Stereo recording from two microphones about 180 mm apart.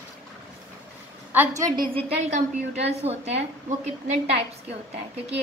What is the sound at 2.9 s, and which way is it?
Speech, 35° right (ahead or behind).